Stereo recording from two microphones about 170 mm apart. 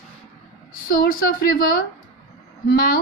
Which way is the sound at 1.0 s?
55° left (ahead or behind).